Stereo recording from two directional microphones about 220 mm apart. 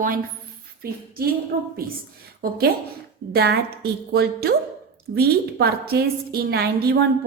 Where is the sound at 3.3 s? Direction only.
45° right (ahead or behind).